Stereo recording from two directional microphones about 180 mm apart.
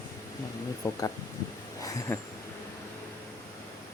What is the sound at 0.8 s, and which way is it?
Speech, 15° left (ahead or behind).